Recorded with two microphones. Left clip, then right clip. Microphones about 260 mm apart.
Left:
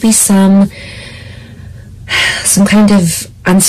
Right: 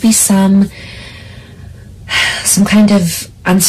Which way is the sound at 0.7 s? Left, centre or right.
Left.